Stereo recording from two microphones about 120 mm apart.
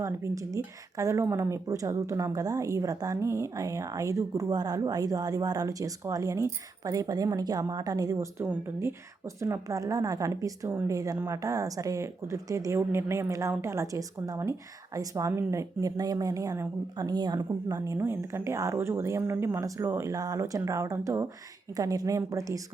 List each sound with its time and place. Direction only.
0.0 s a woman's voice: 25° right (ahead or behind)
10.7 s speech: 15° right (ahead or behind)
10.9 s a woman's voice: 30° right (ahead or behind)
17.7 s a woman's voice: 20° right (ahead or behind)